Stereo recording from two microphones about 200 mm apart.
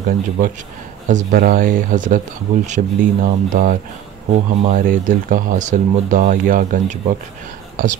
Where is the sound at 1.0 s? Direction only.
40° right (ahead or behind).